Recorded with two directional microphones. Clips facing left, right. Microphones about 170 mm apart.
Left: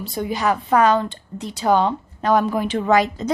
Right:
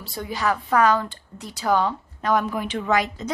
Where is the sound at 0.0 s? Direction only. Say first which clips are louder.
Left 4 dB; 20° left (ahead or behind).